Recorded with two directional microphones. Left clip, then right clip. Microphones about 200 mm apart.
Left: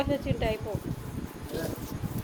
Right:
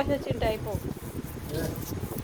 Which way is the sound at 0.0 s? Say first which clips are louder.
Right 2 dB; 5° left (ahead or behind).